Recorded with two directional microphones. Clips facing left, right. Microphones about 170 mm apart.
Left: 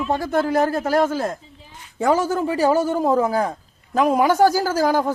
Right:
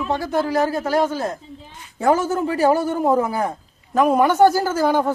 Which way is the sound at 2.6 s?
15° right (ahead or behind).